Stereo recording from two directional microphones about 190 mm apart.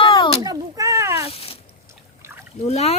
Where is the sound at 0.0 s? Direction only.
25° left (ahead or behind).